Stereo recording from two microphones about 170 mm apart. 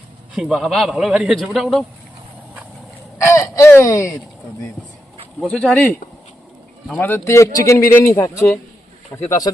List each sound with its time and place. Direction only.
0.3 s a man's voice: centre (ahead or behind)
3.2 s a man's voice: 15° left (ahead or behind)
5.4 s a man's voice: 5° left (ahead or behind)